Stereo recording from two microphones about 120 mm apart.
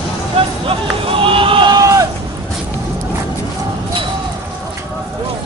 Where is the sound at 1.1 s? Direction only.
45° right (ahead or behind).